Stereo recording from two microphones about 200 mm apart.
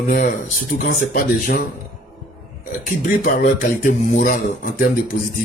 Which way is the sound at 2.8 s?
40° left (ahead or behind).